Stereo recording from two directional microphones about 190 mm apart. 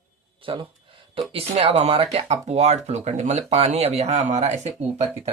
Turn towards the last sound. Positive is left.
turn(degrees=-35)  # may be behind; listen again after turning